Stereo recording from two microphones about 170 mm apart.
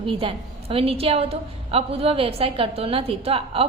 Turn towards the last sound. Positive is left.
turn(degrees=-35)  # may be behind; listen again after turning